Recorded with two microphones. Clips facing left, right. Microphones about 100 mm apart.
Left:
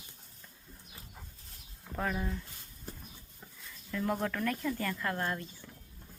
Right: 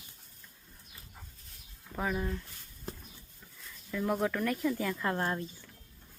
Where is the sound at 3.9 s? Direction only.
5° right (ahead or behind).